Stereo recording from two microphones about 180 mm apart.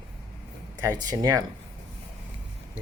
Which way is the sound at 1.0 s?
20° right (ahead or behind).